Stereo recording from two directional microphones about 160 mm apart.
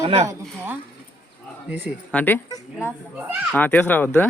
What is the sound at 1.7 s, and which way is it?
Speech, 10° right (ahead or behind).